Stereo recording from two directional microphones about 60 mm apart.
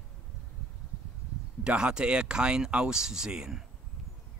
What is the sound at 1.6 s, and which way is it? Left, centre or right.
Speech, centre.